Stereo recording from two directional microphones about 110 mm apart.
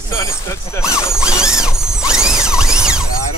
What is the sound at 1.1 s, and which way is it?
Mechanisms, 5° right (ahead or behind).